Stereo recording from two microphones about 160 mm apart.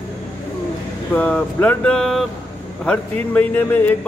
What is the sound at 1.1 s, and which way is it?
A man's voice, 10° left (ahead or behind).